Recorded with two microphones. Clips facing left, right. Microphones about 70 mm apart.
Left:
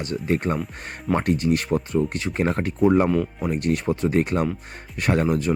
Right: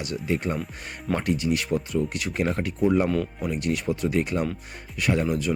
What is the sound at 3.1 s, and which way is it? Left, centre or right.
Speech, centre.